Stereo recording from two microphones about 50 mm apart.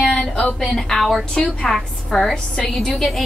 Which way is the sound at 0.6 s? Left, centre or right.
Centre.